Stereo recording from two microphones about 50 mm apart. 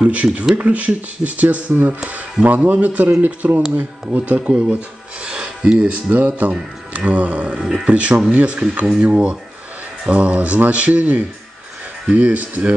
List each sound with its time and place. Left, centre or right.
0.0 s speech: right
7.6 s speech: centre
7.9 s speech: right